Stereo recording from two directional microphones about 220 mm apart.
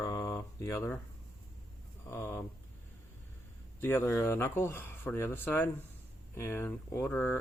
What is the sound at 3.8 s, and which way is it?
Speech, 10° left (ahead or behind).